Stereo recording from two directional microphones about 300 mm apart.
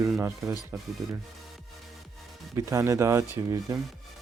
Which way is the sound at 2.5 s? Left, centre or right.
Centre.